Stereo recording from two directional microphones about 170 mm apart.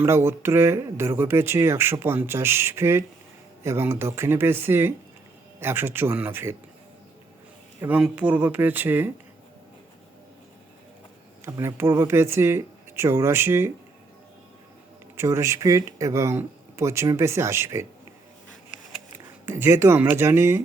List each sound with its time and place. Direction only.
0.0 s speech: 15° right (ahead or behind)
7.8 s speech: 5° right (ahead or behind)
11.4 s speech: 15° right (ahead or behind)
15.1 s speech: 15° right (ahead or behind)
19.5 s speech: 15° right (ahead or behind)